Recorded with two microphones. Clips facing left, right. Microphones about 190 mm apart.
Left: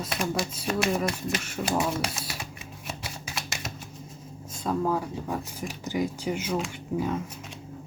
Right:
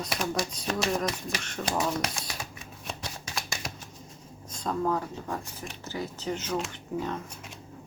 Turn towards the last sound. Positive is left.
turn(degrees=10)  # may be behind; listen again after turning